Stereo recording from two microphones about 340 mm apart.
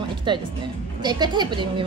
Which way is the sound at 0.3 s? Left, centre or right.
Centre.